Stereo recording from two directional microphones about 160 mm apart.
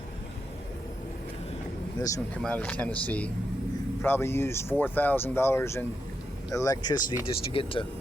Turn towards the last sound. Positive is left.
turn(degrees=35)  # may be behind; listen again after turning